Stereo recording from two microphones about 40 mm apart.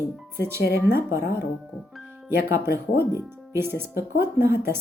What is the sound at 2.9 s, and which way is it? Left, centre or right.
Speech, right.